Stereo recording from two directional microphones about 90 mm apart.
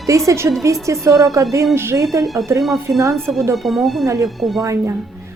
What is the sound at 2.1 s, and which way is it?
Speech, 40° right (ahead or behind).